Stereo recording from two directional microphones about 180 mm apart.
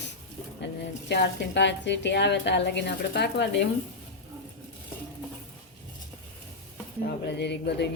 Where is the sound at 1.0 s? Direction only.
70° left (ahead or behind).